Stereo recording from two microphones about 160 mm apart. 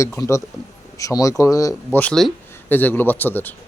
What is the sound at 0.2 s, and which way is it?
A man's voice, 20° left (ahead or behind).